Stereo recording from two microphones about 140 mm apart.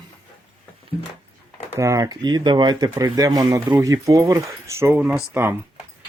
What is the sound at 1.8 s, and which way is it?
Speech, 25° right (ahead or behind).